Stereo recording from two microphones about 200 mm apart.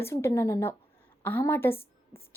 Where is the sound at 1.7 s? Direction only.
30° left (ahead or behind).